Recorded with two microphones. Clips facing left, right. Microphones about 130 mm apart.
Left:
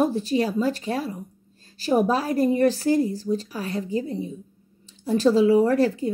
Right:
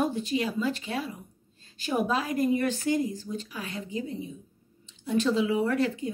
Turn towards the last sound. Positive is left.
turn(degrees=35)  # may be behind; listen again after turning